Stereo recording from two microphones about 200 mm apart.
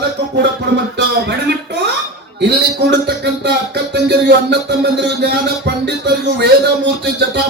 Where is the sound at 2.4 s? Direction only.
60° right (ahead or behind).